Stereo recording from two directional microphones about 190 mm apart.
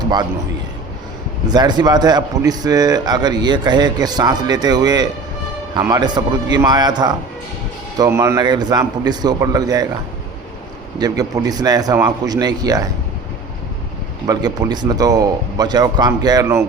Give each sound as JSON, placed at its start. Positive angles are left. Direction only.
{"t": 1.5, "sound": "speech", "side_deg": -20}
{"t": 11.0, "sound": "speech", "side_deg": -20}
{"t": 14.3, "sound": "speech", "side_deg": -20}